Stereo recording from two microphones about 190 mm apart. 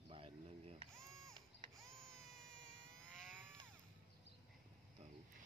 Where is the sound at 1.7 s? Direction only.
Centre (ahead or behind).